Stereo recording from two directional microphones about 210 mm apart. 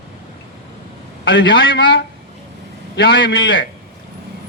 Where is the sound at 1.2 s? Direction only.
60° left (ahead or behind).